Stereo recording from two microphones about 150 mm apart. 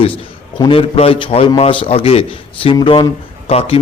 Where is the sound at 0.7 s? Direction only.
40° left (ahead or behind).